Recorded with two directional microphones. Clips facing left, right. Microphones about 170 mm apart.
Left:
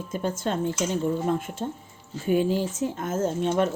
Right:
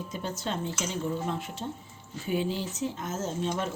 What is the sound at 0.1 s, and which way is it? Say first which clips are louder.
Speech: left 8 dB; 50° left (ahead or behind).